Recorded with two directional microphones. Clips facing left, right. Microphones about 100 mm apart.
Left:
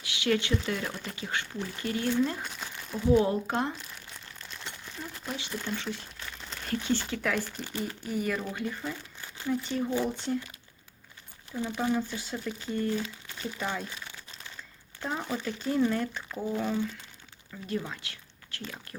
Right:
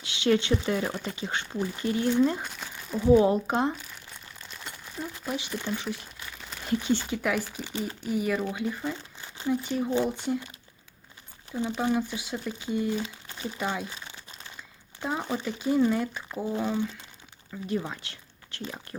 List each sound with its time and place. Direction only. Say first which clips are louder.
0.0 s speech: right 4 dB; 25° right (ahead or behind)
2.4 s crumpling: right 1 dB; centre (ahead or behind)
3.1 s speech: right 4 dB; 20° right (ahead or behind)
4.4 s crumpling: even; 5° right (ahead or behind)
5.6 s speech: right 2 dB; 15° right (ahead or behind)
7.7 s speech: right 2 dB; 20° right (ahead or behind)
8.1 s speech: right 4 dB; 5° right (ahead or behind)
11.5 s speech: right 2 dB; 20° right (ahead or behind)
13.2 s crumpling: right 1 dB; 25° right (ahead or behind)
13.6 s speech: right 3 dB; 15° right (ahead or behind)
13.9 s crumpling: right 1 dB; 25° right (ahead or behind)
15.2 s speech: right 2 dB; 15° right (ahead or behind)
16.5 s speech: right 1 dB; 20° right (ahead or behind)